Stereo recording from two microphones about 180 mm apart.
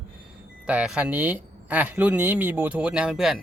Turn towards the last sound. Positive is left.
turn(degrees=-5)  # may be behind; listen again after turning